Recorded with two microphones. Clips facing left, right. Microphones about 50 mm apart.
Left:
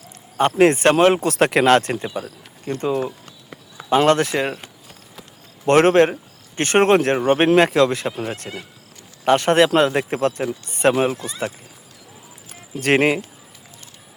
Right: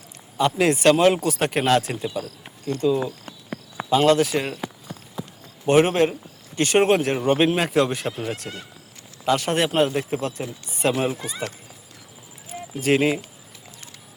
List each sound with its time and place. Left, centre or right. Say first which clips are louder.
0.3 s speech: left 5 dB; left
1.3 s speech: left 5 dB; left
2.0 s speech: left 1 dB; centre
2.6 s speech: even; left
3.8 s speech: left 2 dB; left
5.6 s speech: left 4 dB; left
7.2 s speech: left 3 dB; left
7.5 s speech: left 6 dB; left
8.2 s speech: left 2 dB; left
9.2 s speech: left 6 dB; left
12.8 s speech: left 3 dB; left